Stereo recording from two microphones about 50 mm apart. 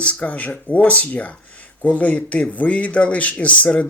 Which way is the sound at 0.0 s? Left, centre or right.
Left.